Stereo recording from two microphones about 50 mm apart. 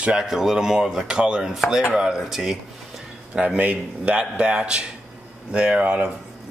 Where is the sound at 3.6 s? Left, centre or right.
Right.